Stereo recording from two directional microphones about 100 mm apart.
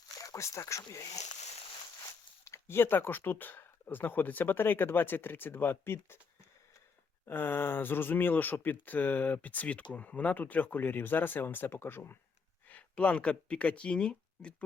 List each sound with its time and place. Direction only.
0.2 s speech: 30° left (ahead or behind)
2.4 s speech: 25° left (ahead or behind)
7.3 s speech: 20° left (ahead or behind)